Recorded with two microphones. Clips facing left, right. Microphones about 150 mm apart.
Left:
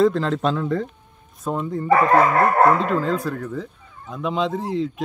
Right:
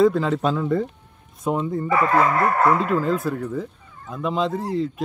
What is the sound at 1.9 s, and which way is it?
Speech, 50° left (ahead or behind).